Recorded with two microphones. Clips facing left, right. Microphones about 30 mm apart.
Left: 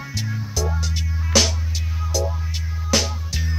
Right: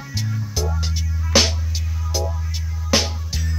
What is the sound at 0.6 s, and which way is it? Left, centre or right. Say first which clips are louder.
Music: left 1 dB; right.